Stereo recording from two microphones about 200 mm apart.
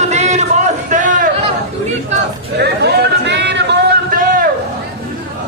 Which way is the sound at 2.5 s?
55° right (ahead or behind).